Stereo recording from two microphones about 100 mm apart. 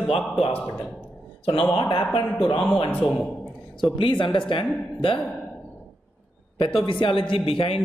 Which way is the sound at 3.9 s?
55° left (ahead or behind).